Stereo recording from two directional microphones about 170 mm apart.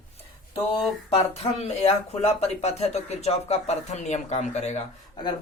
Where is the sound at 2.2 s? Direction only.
40° left (ahead or behind).